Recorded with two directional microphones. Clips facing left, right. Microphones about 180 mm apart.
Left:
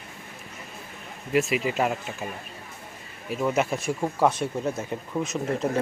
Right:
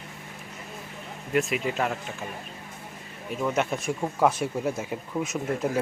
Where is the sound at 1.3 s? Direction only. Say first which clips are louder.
Left 2 dB; 5° left (ahead or behind).